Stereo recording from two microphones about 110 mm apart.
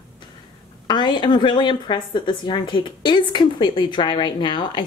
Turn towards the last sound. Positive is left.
turn(degrees=45)  # may be behind; listen again after turning